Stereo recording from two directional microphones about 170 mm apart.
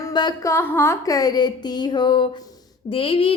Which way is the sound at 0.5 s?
15° left (ahead or behind).